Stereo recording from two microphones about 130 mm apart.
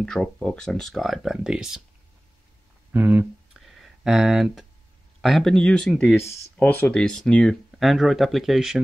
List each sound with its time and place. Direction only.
0.0 s speech: 5° left (ahead or behind)
2.9 s speech: 15° right (ahead or behind)
3.5 s a sound: centre (ahead or behind)
5.2 s speech: centre (ahead or behind)
6.1 s speech: 20° left (ahead or behind)
7.0 s speech: 5° left (ahead or behind)